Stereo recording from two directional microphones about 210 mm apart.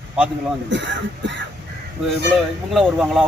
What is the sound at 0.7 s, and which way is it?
Speech, 60° right (ahead or behind).